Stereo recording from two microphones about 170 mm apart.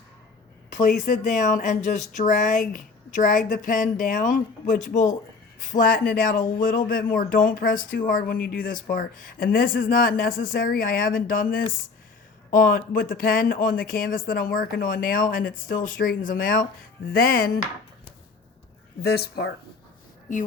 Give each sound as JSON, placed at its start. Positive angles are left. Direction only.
{"t": 0.7, "sound": "speech", "side_deg": 50}
{"t": 19.0, "sound": "speech", "side_deg": 70}